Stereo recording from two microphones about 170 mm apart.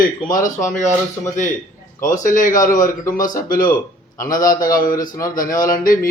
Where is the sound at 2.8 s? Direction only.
20° left (ahead or behind).